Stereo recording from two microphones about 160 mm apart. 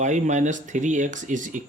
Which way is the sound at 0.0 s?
50° right (ahead or behind).